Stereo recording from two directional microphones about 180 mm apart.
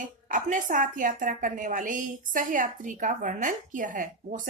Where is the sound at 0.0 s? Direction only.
45° right (ahead or behind).